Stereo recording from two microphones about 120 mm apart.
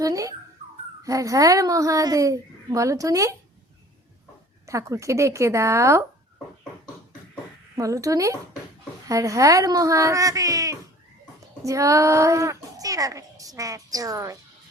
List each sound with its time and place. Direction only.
0.0 s a child's voice: 30° right (ahead or behind)
4.6 s a child's voice: 25° right (ahead or behind)
7.8 s a child's voice: 25° right (ahead or behind)